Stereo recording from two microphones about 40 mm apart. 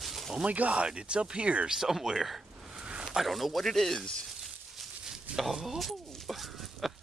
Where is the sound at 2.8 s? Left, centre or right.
Right.